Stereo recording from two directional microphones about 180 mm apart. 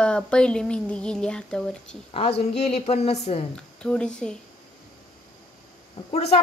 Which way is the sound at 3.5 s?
5° left (ahead or behind).